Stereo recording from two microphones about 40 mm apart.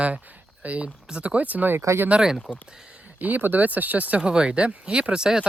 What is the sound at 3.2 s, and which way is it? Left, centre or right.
Speech, right.